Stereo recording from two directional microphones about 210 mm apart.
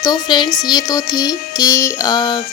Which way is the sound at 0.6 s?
20° left (ahead or behind).